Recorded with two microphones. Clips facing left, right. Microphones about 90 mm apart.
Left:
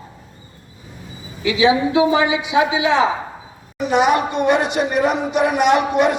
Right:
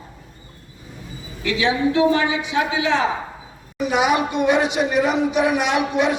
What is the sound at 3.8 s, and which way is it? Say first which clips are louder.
Speech: left 3 dB; 5° right (ahead or behind).